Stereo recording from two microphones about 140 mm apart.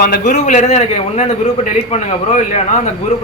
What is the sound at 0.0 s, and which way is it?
Speech, 90° left.